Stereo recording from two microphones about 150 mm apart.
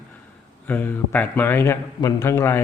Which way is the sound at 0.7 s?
10° left (ahead or behind).